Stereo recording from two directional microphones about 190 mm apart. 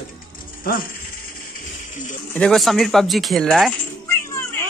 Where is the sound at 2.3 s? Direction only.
Centre (ahead or behind).